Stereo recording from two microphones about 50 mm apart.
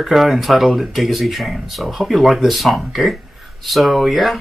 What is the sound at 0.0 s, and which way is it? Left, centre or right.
Speech, centre.